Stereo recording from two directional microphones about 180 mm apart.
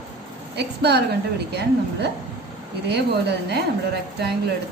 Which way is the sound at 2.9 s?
65° right (ahead or behind).